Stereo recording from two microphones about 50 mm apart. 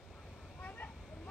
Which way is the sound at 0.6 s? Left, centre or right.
Left.